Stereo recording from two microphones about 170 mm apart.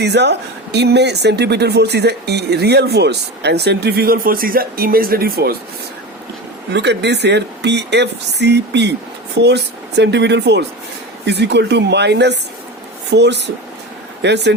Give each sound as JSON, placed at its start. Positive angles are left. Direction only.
{"t": 0.0, "sound": "speech", "side_deg": -85}
{"t": 6.7, "sound": "speech", "side_deg": -90}